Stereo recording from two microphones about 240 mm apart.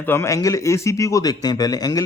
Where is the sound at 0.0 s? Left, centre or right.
Centre.